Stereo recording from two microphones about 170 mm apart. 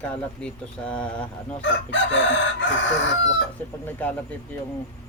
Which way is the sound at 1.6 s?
90° left.